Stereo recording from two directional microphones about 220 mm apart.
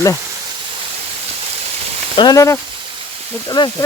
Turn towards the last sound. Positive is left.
turn(degrees=20)  # may be behind; listen again after turning